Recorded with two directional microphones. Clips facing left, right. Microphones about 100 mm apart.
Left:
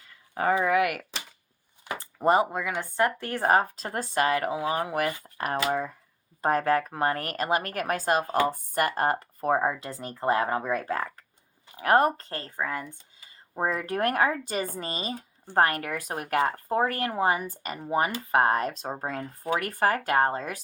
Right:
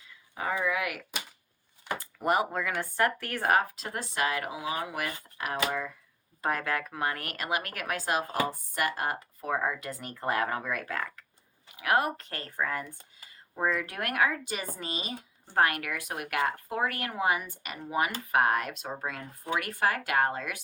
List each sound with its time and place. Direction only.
0.3 s speech: 55° left (ahead or behind)
2.0 s a sound: 30° left (ahead or behind)
2.5 s speech: 15° left (ahead or behind); by 9.1 s 45° left (ahead or behind)
9.5 s speech: 25° left (ahead or behind)
11.8 s speech: 40° left (ahead or behind)
12.5 s speech: 15° left (ahead or behind)
13.6 s speech: 35° left (ahead or behind)